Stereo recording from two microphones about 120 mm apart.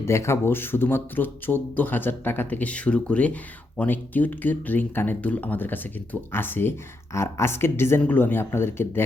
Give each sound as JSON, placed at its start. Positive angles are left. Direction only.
{"t": 0.0, "sound": "speech", "side_deg": 25}